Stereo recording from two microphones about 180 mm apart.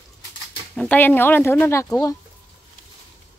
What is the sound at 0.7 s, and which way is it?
Speech, 10° left (ahead or behind).